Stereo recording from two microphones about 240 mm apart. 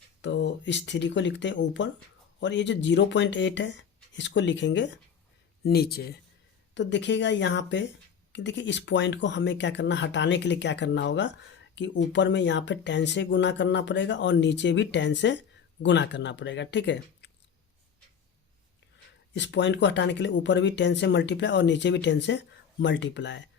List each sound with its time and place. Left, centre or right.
0.2 s speech: left
19.3 s speech: left